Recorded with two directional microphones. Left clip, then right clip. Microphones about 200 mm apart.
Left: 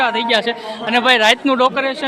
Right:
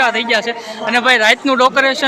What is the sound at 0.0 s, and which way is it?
A man's voice, 10° left (ahead or behind).